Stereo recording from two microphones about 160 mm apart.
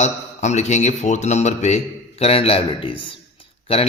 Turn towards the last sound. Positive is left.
turn(degrees=35)  # may be behind; listen again after turning